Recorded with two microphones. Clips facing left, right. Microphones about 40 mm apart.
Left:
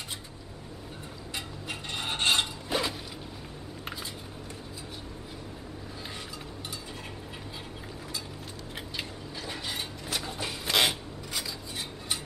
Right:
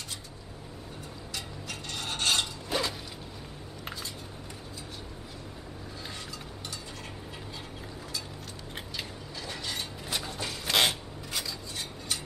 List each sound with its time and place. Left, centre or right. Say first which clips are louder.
1.3 s rub: left 3 dB; left
2.7 s a sound: left 1 dB; centre
8.9 s mechanisms: left 2 dB; centre
10.0 s a sound: left 1 dB; centre
10.3 s wood: left 1 dB; centre
10.7 s filing: even; centre